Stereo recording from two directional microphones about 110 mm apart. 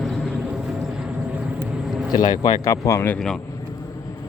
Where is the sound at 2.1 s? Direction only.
40° left (ahead or behind); by 3.1 s 25° left (ahead or behind).